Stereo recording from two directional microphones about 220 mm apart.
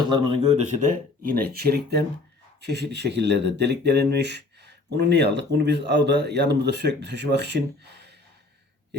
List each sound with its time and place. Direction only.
0.1 s speech: 25° right (ahead or behind); by 8.1 s 50° right (ahead or behind)